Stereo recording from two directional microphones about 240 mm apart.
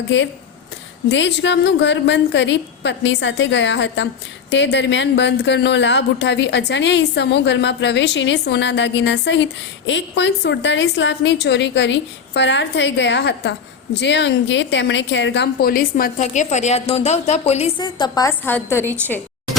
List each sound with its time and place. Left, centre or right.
0.1 s a woman's voice: left; by 19.2 s centre